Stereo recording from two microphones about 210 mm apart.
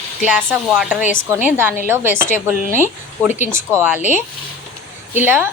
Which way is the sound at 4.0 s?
35° left (ahead or behind).